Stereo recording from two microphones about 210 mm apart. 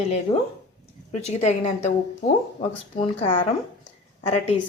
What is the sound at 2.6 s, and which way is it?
Speech, 25° left (ahead or behind).